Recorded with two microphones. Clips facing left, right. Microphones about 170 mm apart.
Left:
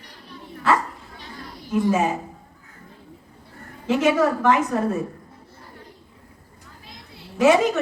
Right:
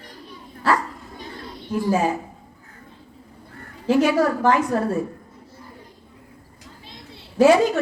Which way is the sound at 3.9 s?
25° left (ahead or behind).